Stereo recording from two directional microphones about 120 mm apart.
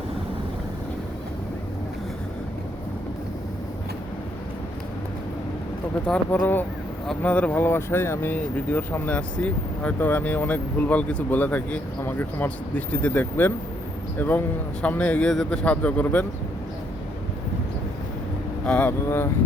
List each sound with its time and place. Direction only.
6.1 s speech: 10° left (ahead or behind)
18.6 s speech: 10° left (ahead or behind)